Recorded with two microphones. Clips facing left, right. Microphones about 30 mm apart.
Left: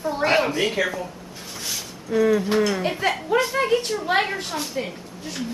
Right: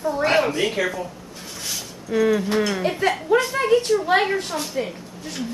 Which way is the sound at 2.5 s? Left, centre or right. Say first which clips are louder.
Even; centre.